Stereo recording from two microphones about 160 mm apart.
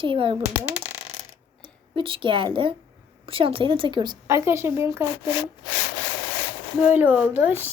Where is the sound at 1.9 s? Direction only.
30° right (ahead or behind).